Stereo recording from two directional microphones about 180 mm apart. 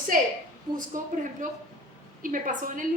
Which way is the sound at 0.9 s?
45° right (ahead or behind).